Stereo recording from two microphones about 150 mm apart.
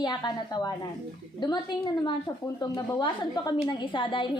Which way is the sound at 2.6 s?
25° left (ahead or behind).